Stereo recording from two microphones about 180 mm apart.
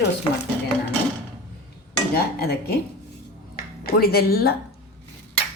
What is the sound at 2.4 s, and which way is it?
Speech, 60° left (ahead or behind).